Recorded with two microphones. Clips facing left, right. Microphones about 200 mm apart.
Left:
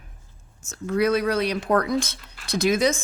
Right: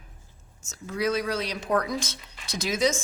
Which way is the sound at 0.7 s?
60° left (ahead or behind).